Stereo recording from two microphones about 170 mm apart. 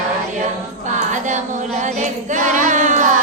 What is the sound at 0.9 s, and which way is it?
Music, 45° right (ahead or behind).